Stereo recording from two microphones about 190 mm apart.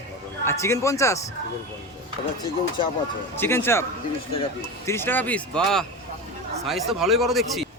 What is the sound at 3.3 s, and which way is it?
Speech, 10° left (ahead or behind).